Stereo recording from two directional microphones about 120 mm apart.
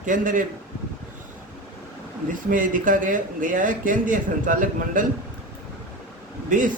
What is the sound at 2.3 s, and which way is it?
A man's voice, 90° right.